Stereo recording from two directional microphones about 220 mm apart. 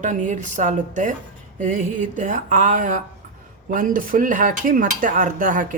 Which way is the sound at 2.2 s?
35° right (ahead or behind).